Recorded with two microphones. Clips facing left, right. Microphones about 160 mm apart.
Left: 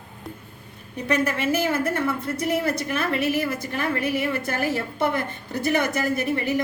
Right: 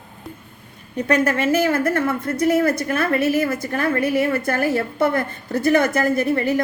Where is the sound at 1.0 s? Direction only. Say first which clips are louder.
Right 4 dB; 50° right (ahead or behind).